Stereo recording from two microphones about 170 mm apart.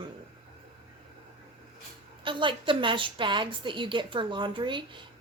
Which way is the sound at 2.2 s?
30° right (ahead or behind).